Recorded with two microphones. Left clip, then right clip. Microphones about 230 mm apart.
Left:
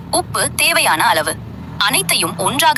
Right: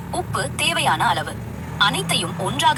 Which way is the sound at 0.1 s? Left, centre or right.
Left.